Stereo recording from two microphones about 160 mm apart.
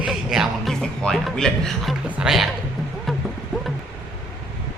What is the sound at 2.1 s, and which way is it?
Music, 5° right (ahead or behind).